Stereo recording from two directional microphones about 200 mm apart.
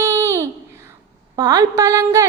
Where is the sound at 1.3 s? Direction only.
20° right (ahead or behind).